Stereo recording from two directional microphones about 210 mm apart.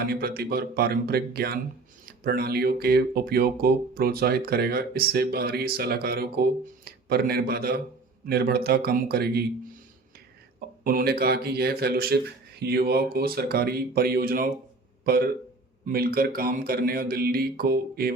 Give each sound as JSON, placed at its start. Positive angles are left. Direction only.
{"t": 0.0, "sound": "speech", "side_deg": -45}
{"t": 10.8, "sound": "speech", "side_deg": -45}